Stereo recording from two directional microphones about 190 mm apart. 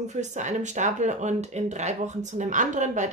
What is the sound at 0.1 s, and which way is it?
Speech, 40° right (ahead or behind).